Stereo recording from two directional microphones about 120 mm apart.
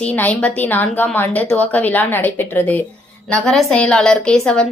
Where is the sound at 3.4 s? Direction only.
5° left (ahead or behind).